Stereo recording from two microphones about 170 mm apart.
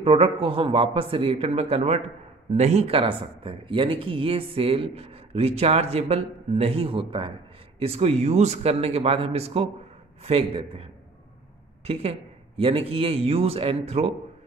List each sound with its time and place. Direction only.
0.0 s speech: 35° right (ahead or behind)